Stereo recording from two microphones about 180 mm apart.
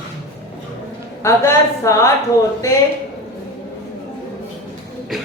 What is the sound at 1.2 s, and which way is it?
Speech, 15° left (ahead or behind).